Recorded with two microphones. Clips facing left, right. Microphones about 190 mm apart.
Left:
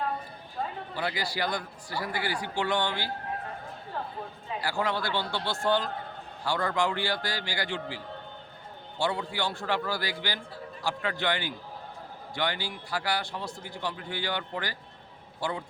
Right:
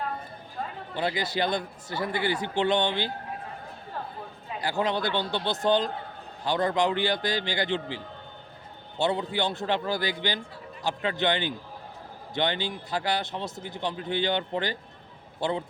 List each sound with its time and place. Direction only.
0.9 s a man's voice: 20° right (ahead or behind)
4.6 s a man's voice: 20° right (ahead or behind)